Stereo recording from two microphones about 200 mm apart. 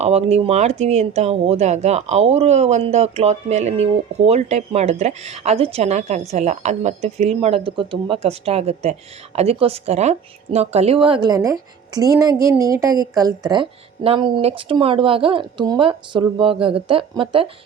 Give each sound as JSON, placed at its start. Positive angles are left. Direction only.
{"t": 0.0, "sound": "speech", "side_deg": -30}